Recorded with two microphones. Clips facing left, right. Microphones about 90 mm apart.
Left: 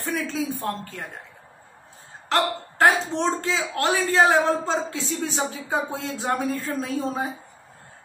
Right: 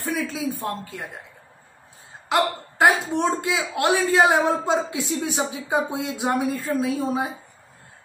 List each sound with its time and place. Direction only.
0.0 s speech: centre (ahead or behind)
2.2 s a woman's voice: 10° right (ahead or behind)